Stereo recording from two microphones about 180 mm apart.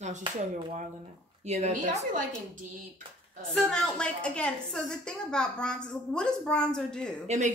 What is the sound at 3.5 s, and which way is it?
A woman's voice, 5° left (ahead or behind).